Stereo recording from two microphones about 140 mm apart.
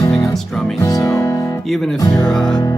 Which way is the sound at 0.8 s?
25° left (ahead or behind).